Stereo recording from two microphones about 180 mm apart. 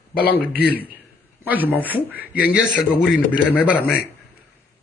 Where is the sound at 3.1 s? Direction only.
5° right (ahead or behind).